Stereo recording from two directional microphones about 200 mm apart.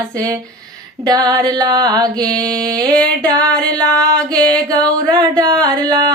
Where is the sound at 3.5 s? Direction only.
5° left (ahead or behind).